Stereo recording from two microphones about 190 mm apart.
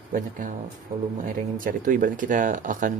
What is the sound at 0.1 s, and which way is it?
Speech, 45° right (ahead or behind).